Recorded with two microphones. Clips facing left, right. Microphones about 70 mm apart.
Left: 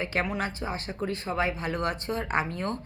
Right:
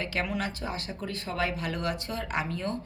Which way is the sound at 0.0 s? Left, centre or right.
Left.